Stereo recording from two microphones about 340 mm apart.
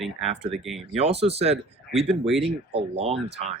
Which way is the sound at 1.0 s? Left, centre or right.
Centre.